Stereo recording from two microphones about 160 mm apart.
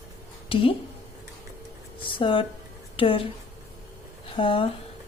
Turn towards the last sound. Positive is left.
turn(degrees=35)  # may be behind; listen again after turning